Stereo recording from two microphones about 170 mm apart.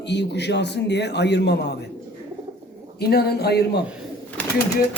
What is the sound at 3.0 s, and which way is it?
Speech, 65° left (ahead or behind).